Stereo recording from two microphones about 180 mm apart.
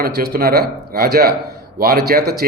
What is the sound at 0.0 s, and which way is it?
Speech, 55° right (ahead or behind).